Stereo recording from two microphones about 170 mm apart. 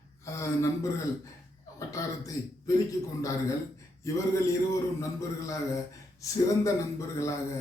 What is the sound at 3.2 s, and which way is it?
A man's voice, 20° left (ahead or behind).